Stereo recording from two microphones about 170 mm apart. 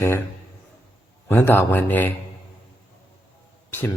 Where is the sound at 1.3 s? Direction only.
15° left (ahead or behind).